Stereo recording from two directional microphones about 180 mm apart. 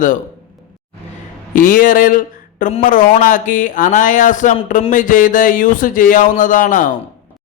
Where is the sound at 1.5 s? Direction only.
50° left (ahead or behind).